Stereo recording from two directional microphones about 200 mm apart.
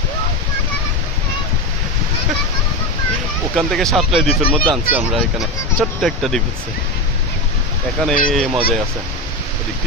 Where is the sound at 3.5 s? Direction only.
Centre (ahead or behind).